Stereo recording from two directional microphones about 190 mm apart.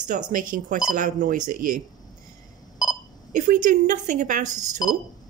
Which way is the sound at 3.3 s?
40° right (ahead or behind).